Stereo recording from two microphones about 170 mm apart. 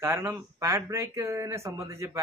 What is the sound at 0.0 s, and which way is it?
Speech, 15° right (ahead or behind).